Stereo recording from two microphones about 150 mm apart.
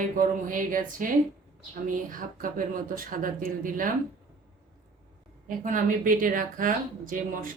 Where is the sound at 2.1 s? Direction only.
65° right (ahead or behind).